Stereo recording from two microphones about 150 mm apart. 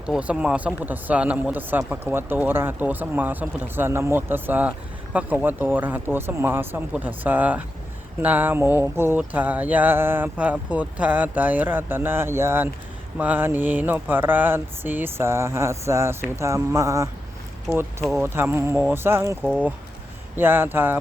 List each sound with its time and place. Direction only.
0.0 s mantra: 10° right (ahead or behind)